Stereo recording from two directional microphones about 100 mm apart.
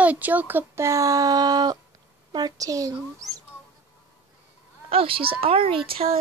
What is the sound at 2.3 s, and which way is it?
Speech, 40° right (ahead or behind).